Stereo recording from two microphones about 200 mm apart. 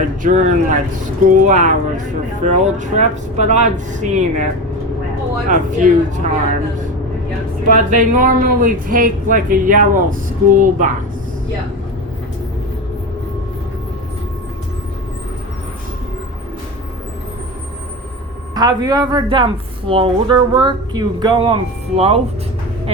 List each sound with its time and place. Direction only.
0.0 s speech: 40° right (ahead or behind)
5.5 s speech: 40° right (ahead or behind)
7.7 s a woman's voice: 40° right (ahead or behind)
18.5 s speech: 20° right (ahead or behind)